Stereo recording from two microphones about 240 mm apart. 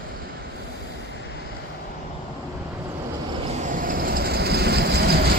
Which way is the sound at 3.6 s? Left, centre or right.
Right.